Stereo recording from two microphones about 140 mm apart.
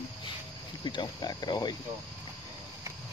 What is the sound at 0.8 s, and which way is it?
Speech, 35° left (ahead or behind).